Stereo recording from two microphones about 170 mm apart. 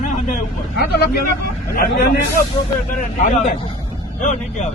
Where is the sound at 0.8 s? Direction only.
70° left (ahead or behind).